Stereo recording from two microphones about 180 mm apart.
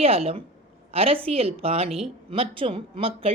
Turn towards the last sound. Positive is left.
turn(degrees=-30)  # may be behind; listen again after turning